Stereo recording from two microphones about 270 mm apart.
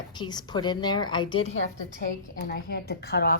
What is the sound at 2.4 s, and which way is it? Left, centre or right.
Speech, left.